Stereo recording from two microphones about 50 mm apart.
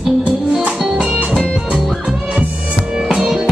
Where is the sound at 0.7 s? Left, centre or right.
Centre.